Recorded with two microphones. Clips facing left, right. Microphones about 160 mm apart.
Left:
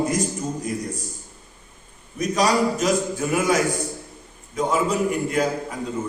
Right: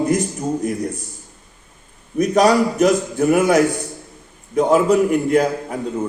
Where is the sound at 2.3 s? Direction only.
60° right (ahead or behind).